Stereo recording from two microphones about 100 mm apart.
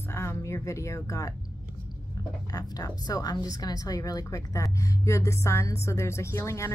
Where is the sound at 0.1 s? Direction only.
25° left (ahead or behind).